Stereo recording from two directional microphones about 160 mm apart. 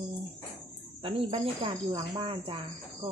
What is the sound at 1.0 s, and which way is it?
Speech, 35° right (ahead or behind).